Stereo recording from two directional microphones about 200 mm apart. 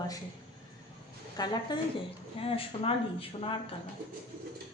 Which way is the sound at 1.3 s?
20° left (ahead or behind).